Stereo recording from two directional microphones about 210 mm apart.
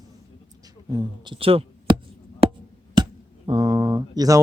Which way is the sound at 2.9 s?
20° right (ahead or behind).